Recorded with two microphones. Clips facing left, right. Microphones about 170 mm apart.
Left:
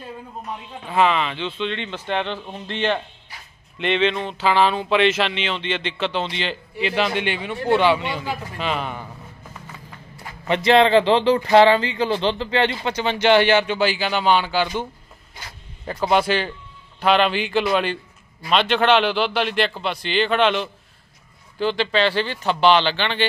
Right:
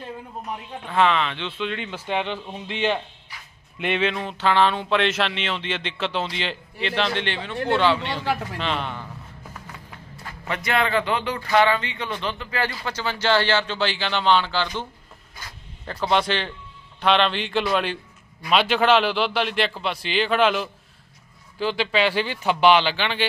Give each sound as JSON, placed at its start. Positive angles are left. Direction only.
{"t": 0.8, "sound": "speech", "side_deg": 5}
{"t": 10.5, "sound": "speech", "side_deg": 30}
{"t": 15.9, "sound": "speech", "side_deg": 10}